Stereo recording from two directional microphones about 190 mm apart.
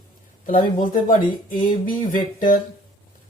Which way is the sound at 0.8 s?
45° left (ahead or behind).